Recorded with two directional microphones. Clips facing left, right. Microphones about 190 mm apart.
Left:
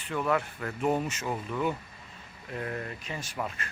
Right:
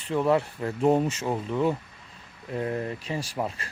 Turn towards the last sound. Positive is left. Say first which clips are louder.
# right 5 dB
turn(degrees=-30)  # may be behind; listen again after turning